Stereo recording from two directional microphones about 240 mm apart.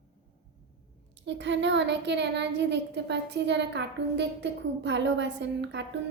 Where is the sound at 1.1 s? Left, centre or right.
Right.